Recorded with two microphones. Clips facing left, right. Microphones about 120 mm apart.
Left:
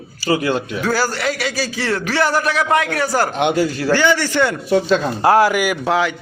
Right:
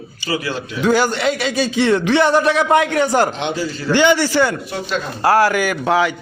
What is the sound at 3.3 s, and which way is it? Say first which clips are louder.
Speech: left 5 dB; 60° left (ahead or behind).